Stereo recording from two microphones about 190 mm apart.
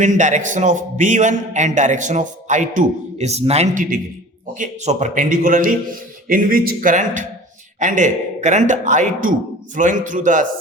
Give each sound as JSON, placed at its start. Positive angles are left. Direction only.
{"t": 0.0, "sound": "a man's voice", "side_deg": -40}